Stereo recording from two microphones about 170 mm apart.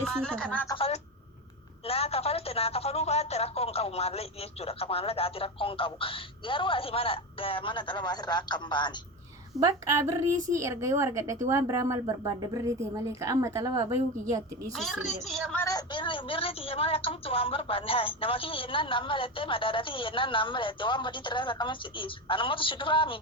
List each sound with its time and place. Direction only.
0.0 s speech: 5° left (ahead or behind)
1.9 s a woman's voice: 35° left (ahead or behind)
9.6 s a woman's voice: 20° right (ahead or behind)
14.8 s speech: centre (ahead or behind)
15.6 s a woman's voice: 25° left (ahead or behind)